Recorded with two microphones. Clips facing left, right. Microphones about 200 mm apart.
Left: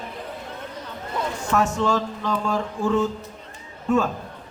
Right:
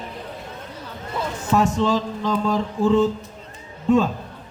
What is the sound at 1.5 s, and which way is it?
A man's voice, 15° right (ahead or behind).